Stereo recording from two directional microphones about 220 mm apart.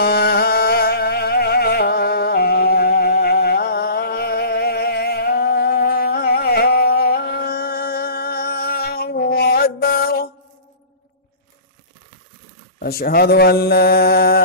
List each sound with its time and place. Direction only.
0.0 s music: 45° left (ahead or behind)
12.7 s speech: 45° left (ahead or behind)